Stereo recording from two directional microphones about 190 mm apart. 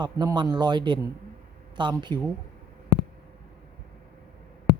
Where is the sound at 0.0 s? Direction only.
20° right (ahead or behind).